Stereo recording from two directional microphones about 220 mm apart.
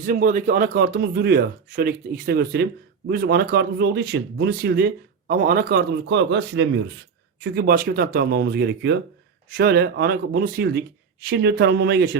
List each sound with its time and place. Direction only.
0.0 s speech: 40° right (ahead or behind); by 6.9 s 55° right (ahead or behind)
7.4 s speech: 45° right (ahead or behind)